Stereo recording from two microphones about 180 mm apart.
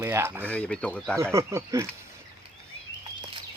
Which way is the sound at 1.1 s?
15° right (ahead or behind).